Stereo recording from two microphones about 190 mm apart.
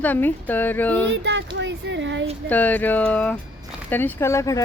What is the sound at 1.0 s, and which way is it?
Speech, 70° right (ahead or behind).